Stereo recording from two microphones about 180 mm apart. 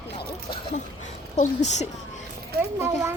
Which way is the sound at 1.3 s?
40° left (ahead or behind).